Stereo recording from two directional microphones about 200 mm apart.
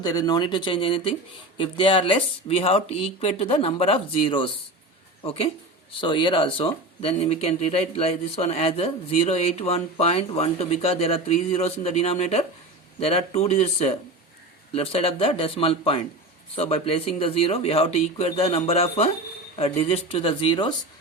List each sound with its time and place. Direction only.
0.0 s a woman's voice: 20° left (ahead or behind)